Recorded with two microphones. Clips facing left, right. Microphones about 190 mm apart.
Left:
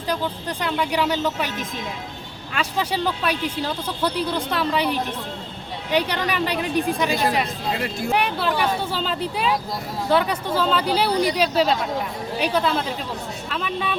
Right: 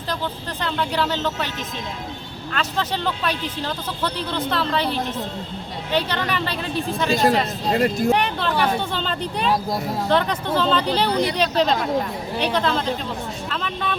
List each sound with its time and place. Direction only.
0.6 s speech: 10° left (ahead or behind)
2.5 s speech: 10° left (ahead or behind)
7.7 s speech: 45° right (ahead or behind)
8.1 s a sound: 10° left (ahead or behind)
8.9 s speech: 5° left (ahead or behind)